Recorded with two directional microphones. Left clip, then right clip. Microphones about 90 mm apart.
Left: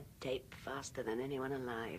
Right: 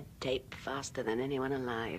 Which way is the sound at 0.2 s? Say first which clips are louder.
Right 6 dB; 25° left (ahead or behind).